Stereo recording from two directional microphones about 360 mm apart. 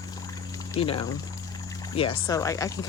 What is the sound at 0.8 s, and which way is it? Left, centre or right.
Speech, centre.